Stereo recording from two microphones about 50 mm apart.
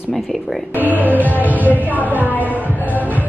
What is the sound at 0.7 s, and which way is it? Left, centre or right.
Speech, right.